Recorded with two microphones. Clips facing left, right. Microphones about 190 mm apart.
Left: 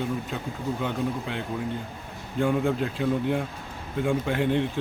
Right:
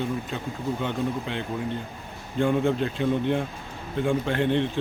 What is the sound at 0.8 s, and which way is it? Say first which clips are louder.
Speech: even; 5° left (ahead or behind).